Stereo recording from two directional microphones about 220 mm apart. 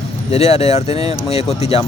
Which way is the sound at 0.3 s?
30° left (ahead or behind).